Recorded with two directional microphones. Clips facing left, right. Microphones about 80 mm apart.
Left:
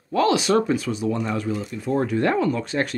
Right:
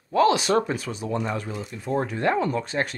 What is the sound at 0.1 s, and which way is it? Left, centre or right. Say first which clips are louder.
Speech: left 1 dB; right.